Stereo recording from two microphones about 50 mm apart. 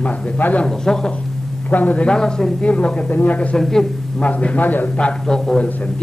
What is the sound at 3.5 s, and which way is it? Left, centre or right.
Speech, centre.